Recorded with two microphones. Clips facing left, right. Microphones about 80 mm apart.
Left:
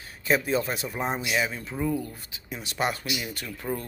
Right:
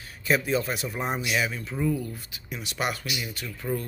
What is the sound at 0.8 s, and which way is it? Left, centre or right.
Speech, centre.